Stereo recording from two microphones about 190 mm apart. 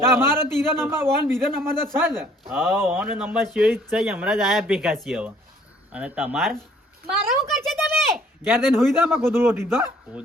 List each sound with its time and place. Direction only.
0.1 s a man's voice: 10° right (ahead or behind)
7.1 s a sound: centre (ahead or behind)
9.0 s a man's voice: 10° right (ahead or behind)